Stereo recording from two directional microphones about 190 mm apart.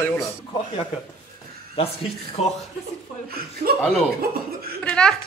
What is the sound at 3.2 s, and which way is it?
Speech, 55° right (ahead or behind).